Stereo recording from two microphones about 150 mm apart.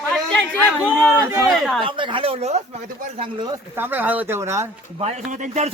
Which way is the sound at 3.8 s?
10° right (ahead or behind).